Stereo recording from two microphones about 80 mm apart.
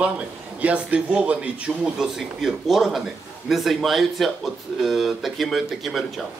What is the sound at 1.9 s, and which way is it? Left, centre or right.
Speech, centre.